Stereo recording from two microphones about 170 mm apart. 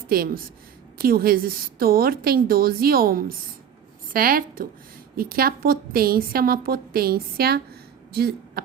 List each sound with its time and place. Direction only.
0.1 s a woman's voice: 60° right (ahead or behind)